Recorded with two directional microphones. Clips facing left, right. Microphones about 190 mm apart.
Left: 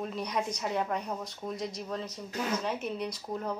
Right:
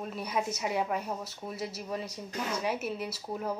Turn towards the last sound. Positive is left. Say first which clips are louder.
# even
turn(degrees=-5)  # may be behind; listen again after turning